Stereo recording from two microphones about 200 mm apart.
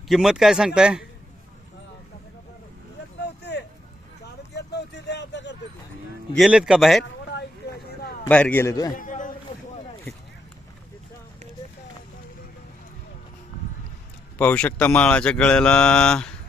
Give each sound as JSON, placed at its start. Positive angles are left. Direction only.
{"t": 0.1, "sound": "speech", "side_deg": 0}
{"t": 4.5, "sound": "vehicle", "side_deg": 60}
{"t": 6.3, "sound": "speech", "side_deg": 0}
{"t": 7.0, "sound": "a sound", "side_deg": 55}
{"t": 8.3, "sound": "a man's voice", "side_deg": 5}
{"t": 9.0, "sound": "a sound", "side_deg": 40}
{"t": 14.3, "sound": "speech", "side_deg": 5}